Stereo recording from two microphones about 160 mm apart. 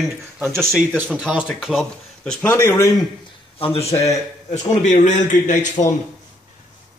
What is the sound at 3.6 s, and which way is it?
Speech, 35° left (ahead or behind).